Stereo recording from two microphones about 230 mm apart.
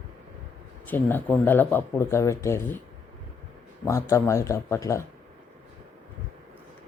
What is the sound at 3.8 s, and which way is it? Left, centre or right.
Speech, centre.